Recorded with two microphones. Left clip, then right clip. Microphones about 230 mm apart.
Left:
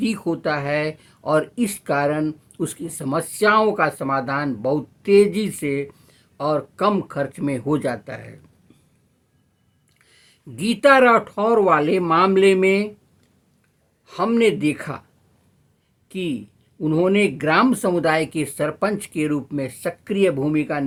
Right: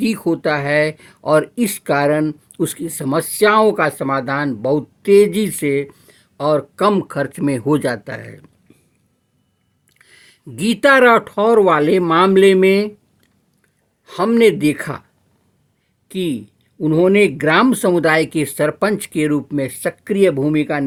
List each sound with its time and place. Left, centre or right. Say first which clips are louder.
0.0 s speech: right 5 dB; right
10.0 s speech: right 7 dB; right
14.0 s speech: right 5 dB; right
16.0 s a man's voice: right 5 dB; right